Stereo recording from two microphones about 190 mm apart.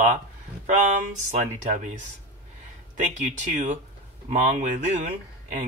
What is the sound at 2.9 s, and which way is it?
Speech, 40° right (ahead or behind).